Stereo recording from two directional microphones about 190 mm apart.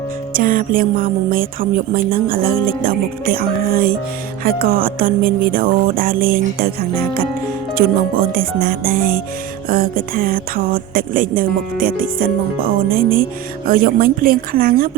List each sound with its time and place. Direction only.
0.3 s speech: 45° right (ahead or behind)